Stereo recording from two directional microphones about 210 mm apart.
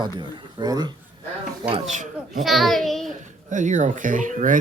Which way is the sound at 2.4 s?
Centre (ahead or behind).